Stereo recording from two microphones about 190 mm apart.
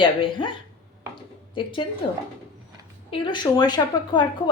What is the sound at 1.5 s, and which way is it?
Speech, 25° left (ahead or behind).